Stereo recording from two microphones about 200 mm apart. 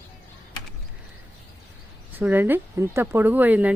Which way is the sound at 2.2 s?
10° right (ahead or behind).